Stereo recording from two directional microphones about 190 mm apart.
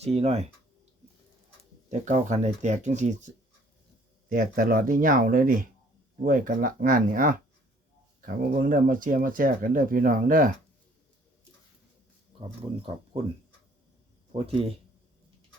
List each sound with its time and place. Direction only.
0.0 s speech: 35° right (ahead or behind)
1.9 s speech: 40° right (ahead or behind)
4.3 s speech: 45° right (ahead or behind)
14.3 s a man's voice: 30° right (ahead or behind)